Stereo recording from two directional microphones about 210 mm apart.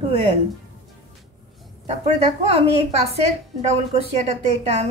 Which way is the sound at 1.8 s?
30° right (ahead or behind).